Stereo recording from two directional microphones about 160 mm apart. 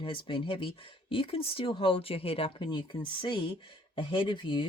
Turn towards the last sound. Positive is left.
turn(degrees=30)  # may be behind; listen again after turning